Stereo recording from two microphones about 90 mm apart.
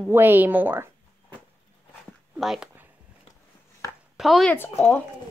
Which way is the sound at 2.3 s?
5° right (ahead or behind).